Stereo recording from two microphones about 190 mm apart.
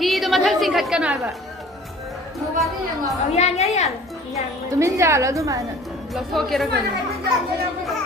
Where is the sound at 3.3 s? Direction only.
35° left (ahead or behind).